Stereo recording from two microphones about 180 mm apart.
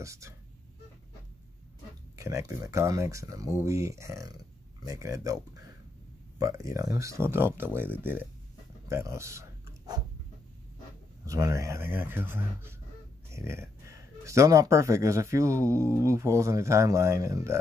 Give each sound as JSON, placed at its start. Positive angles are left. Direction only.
{"t": 0.0, "sound": "speech", "side_deg": -15}
{"t": 2.1, "sound": "speech", "side_deg": -15}
{"t": 8.8, "sound": "a sound", "side_deg": -15}
{"t": 11.2, "sound": "speech", "side_deg": -15}